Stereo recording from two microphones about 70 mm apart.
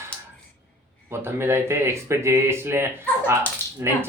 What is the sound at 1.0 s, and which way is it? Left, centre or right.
Speech, right.